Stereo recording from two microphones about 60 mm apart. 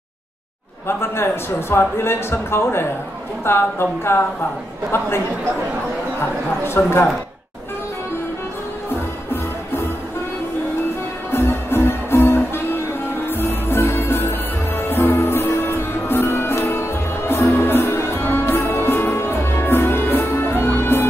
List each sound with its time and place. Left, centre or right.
0.8 s a man's voice: left
6.6 s a man's voice: left
11.3 s music: left